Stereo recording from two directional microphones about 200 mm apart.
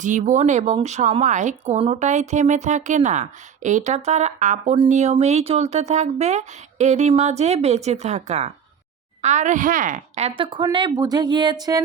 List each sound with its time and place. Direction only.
0.0 s a woman's voice: 40° right (ahead or behind); by 11.8 s 20° right (ahead or behind)